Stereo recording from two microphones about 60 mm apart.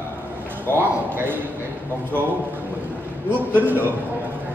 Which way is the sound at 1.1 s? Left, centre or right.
Right.